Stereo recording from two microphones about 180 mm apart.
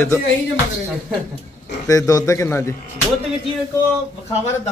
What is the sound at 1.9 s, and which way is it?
Speech, 20° left (ahead or behind).